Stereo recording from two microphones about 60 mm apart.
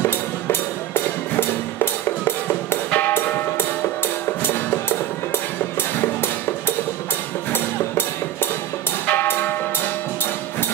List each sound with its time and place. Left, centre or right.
0.0 s music: left
4.4 s music: left
7.5 s music: left